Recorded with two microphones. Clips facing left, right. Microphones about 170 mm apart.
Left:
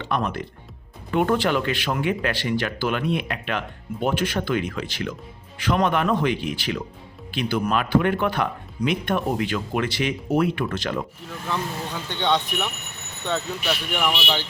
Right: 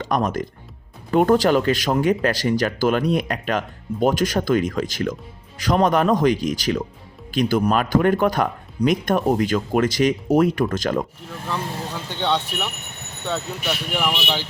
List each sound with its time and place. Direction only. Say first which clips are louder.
0.0 s speech: right 4 dB; 40° right (ahead or behind)
12.0 s speech: even; 5° right (ahead or behind)